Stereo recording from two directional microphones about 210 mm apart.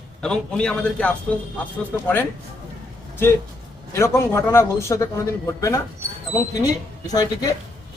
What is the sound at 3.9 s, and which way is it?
A man's voice, 15° left (ahead or behind).